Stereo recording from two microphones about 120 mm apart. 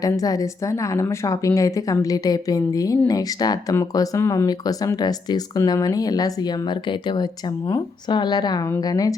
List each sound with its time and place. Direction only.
0.0 s a woman's voice: 30° left (ahead or behind)